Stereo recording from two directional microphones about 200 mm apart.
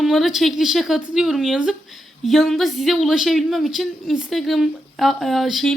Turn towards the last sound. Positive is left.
turn(degrees=0)  # may be behind; listen again after turning